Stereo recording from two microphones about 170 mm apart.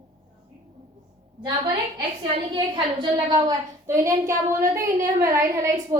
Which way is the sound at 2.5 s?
25° right (ahead or behind).